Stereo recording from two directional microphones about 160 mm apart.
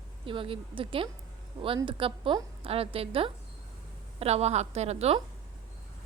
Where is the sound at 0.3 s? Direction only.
35° right (ahead or behind).